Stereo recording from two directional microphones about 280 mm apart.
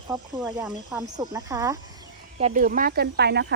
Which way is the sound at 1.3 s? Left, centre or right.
Centre.